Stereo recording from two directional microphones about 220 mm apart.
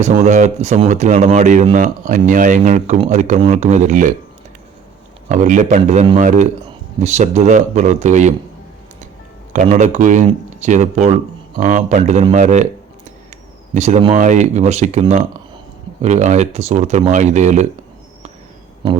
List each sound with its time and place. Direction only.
0.0 s speech: 35° right (ahead or behind)
5.3 s speech: 35° right (ahead or behind)
9.5 s speech: 35° right (ahead or behind)
13.7 s speech: 30° right (ahead or behind)